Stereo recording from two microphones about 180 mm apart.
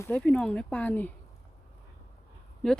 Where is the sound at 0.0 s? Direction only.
5° left (ahead or behind).